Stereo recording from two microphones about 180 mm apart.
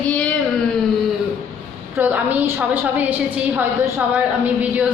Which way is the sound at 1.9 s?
10° right (ahead or behind).